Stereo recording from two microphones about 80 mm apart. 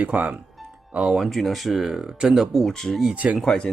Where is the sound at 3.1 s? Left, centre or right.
Centre.